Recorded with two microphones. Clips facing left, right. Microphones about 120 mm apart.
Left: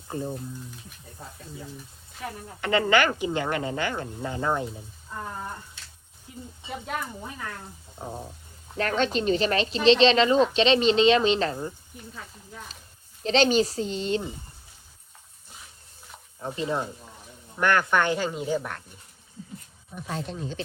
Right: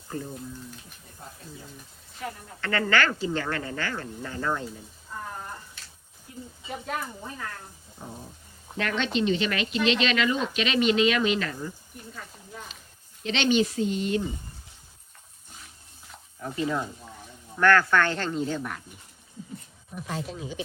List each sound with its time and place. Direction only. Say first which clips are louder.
0.1 s speech: left 3 dB; 20° left (ahead or behind)
2.2 s speech: left 2 dB; 20° left (ahead or behind)
6.3 s speech: even; 20° left (ahead or behind)
6.7 s speech: even; 5° left (ahead or behind)
8.8 s speech: left 2 dB; 40° left (ahead or behind)
13.2 s speech: left 3 dB; 35° left (ahead or behind)
16.4 s speech: even; 30° left (ahead or behind)
17.6 s speech: right 2 dB; 20° left (ahead or behind)
20.0 s speech: left 1 dB; centre (ahead or behind)